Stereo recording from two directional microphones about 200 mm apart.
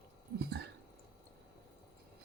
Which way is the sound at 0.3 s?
55° right (ahead or behind).